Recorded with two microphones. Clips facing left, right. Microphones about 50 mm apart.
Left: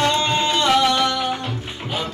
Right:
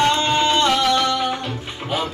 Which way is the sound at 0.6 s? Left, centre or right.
Centre.